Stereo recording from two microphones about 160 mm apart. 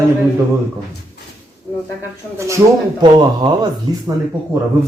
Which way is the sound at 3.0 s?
25° right (ahead or behind).